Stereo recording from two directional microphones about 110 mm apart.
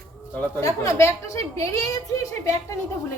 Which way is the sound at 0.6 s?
25° left (ahead or behind).